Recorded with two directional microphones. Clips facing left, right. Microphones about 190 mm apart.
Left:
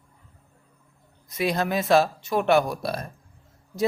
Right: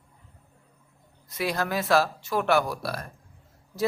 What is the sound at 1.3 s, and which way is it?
Speech, 20° left (ahead or behind).